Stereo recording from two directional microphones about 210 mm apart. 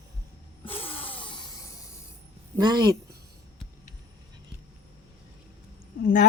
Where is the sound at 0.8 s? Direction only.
25° left (ahead or behind).